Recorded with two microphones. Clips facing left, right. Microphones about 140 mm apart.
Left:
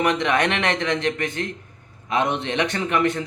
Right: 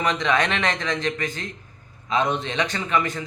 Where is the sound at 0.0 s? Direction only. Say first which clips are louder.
Left 2 dB; 55° left (ahead or behind).